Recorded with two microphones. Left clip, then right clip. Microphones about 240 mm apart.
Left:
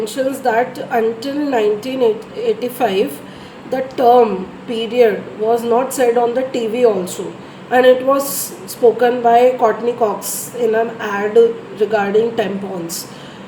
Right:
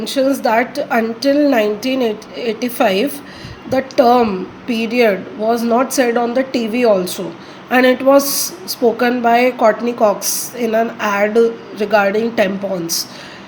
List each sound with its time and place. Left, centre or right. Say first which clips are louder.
0.0 s a woman's voice: right 2 dB; right